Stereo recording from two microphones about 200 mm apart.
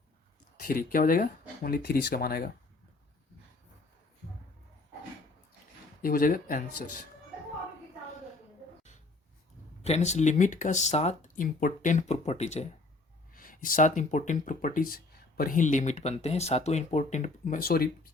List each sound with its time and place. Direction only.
0.6 s speech: 45° left (ahead or behind)
6.0 s speech: 45° left (ahead or behind)
9.8 s speech: 35° left (ahead or behind)
13.3 s speech: 45° left (ahead or behind)